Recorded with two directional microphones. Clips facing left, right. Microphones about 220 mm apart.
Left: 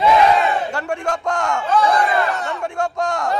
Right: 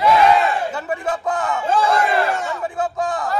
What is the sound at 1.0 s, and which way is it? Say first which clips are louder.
Speech: even; 5° right (ahead or behind).